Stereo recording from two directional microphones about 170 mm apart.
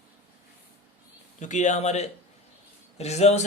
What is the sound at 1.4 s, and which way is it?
Speech, 45° left (ahead or behind).